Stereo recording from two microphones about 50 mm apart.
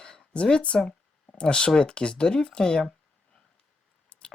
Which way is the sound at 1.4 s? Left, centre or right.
Left.